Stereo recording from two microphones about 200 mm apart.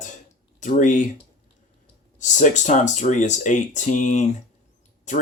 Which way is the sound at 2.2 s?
40° left (ahead or behind).